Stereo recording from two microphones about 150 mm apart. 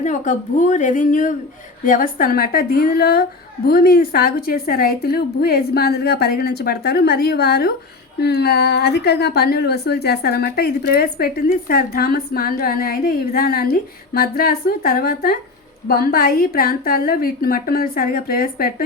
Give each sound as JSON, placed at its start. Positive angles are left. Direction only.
{"t": 0.0, "sound": "a woman's voice", "side_deg": 55}
{"t": 15.9, "sound": "a woman's voice", "side_deg": 80}